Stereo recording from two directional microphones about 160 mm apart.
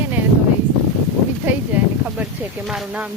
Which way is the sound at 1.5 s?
10° right (ahead or behind).